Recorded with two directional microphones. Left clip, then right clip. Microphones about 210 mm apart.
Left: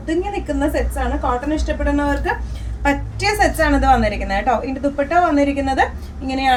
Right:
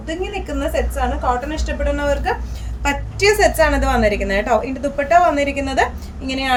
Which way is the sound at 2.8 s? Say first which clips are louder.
Right 2 dB; 45° right (ahead or behind).